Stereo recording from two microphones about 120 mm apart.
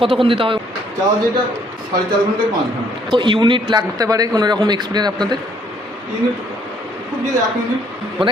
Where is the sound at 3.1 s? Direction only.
40° right (ahead or behind).